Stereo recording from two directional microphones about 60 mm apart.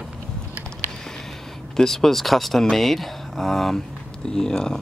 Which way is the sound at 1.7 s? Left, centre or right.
Centre.